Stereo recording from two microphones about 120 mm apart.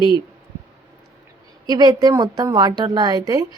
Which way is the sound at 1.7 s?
35° right (ahead or behind).